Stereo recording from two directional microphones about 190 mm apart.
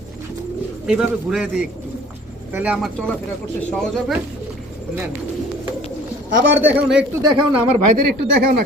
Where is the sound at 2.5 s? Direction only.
5° right (ahead or behind).